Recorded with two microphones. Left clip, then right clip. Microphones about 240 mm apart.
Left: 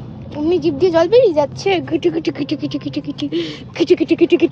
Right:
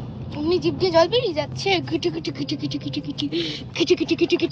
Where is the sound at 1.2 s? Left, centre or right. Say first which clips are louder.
Left 11 dB; centre.